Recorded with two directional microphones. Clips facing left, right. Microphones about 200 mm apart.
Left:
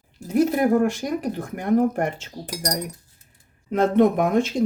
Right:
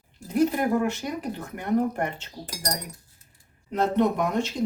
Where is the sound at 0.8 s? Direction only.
45° left (ahead or behind).